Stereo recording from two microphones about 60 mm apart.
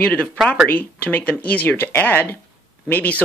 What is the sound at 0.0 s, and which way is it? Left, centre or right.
Speech, left.